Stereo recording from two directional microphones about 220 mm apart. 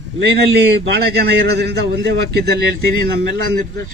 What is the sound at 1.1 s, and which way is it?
A man's voice, 50° right (ahead or behind).